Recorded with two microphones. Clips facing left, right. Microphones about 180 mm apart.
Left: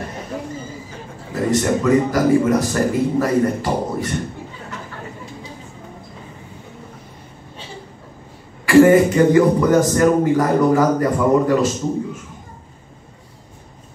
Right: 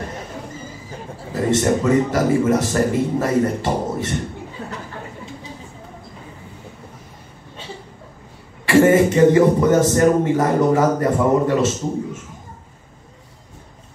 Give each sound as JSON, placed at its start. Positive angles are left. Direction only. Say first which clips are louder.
{"t": 1.3, "sound": "speech", "louder": "even", "side_deg": -25}
{"t": 8.6, "sound": "speech", "louder": "left 3 dB", "side_deg": -25}